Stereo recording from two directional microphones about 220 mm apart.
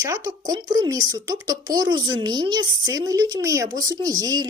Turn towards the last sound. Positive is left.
turn(degrees=-15)  # may be behind; listen again after turning